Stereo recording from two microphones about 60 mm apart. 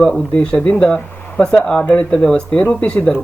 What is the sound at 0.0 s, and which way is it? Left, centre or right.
Speech, centre.